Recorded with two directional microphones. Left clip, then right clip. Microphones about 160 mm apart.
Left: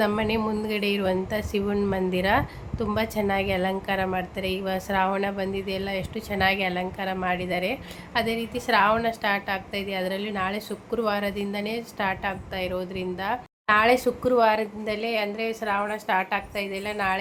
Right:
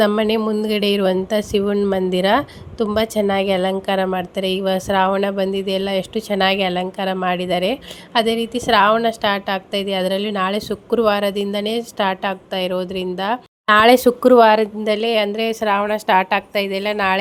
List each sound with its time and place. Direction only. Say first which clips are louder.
0.0 s a woman's voice: right 8 dB; 50° right (ahead or behind); by 14.4 s 75° right (ahead or behind)
14.4 s a woman's voice: right 9 dB; 50° right (ahead or behind); by 17.2 s 75° right (ahead or behind)